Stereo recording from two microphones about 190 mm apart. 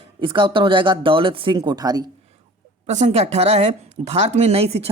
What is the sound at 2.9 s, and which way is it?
Speech, 35° right (ahead or behind).